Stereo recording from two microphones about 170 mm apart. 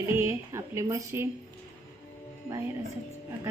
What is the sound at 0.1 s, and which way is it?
A woman's voice, 15° right (ahead or behind).